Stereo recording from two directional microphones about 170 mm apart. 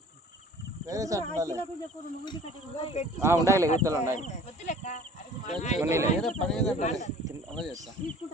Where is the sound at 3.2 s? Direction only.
15° right (ahead or behind).